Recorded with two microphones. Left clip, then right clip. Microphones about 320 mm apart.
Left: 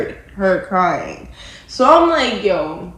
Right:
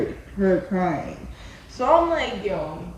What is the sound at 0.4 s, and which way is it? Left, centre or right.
A woman's voice, right.